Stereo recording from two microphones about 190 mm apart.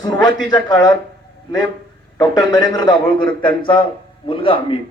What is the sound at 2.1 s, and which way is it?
Speech, 20° left (ahead or behind).